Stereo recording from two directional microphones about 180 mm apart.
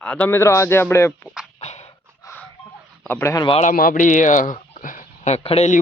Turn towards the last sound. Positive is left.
turn(degrees=35)  # may be behind; listen again after turning